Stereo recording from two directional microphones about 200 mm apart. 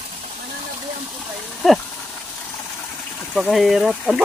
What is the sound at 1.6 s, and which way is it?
Speech, centre (ahead or behind).